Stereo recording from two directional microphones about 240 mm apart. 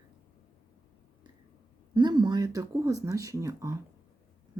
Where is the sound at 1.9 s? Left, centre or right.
Centre.